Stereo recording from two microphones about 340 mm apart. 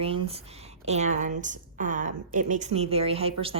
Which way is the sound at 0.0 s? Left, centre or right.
Centre.